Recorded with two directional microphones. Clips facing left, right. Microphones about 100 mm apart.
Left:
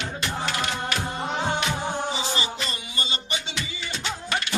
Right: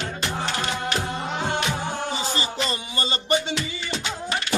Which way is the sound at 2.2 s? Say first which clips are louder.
Right 2 dB; 35° right (ahead or behind).